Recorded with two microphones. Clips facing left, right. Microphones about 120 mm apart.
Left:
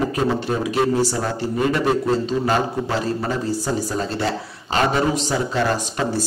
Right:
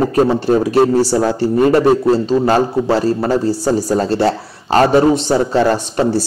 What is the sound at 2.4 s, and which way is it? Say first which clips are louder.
A man's voice: right 7 dB; 40° right (ahead or behind).